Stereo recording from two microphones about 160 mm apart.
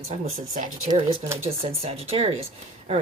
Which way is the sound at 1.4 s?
40° right (ahead or behind).